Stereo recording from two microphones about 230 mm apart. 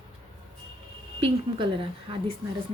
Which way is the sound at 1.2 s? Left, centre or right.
Right.